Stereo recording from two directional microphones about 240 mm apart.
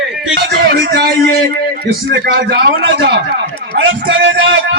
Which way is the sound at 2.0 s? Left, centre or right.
Right.